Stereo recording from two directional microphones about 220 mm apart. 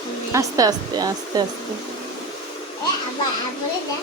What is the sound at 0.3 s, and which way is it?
Speech, 15° right (ahead or behind).